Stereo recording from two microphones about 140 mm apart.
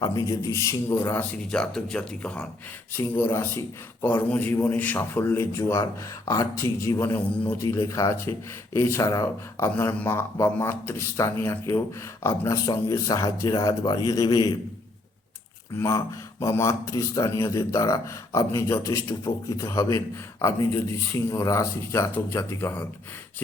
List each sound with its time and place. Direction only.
0.3 s speech: 20° left (ahead or behind)
1.5 s a man's voice: 5° left (ahead or behind); by 14.5 s 25° left (ahead or behind)
15.8 s speech: 20° left (ahead or behind)